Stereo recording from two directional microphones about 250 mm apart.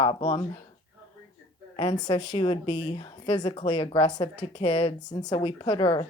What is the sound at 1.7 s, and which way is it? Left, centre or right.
A woman's voice, left.